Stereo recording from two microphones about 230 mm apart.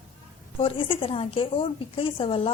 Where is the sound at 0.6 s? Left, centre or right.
Left.